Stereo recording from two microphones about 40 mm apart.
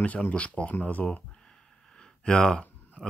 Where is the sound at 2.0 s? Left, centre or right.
Left.